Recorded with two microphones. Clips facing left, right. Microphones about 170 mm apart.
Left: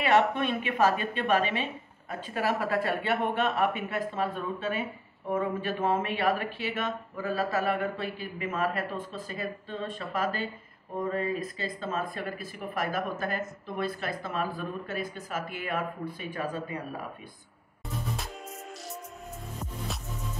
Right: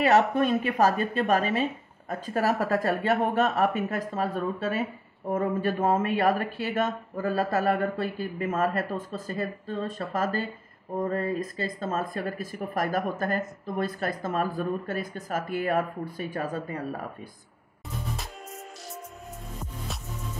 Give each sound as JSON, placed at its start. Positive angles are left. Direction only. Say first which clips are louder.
{"t": 0.0, "sound": "a woman's voice", "louder": "right 3 dB", "side_deg": -40}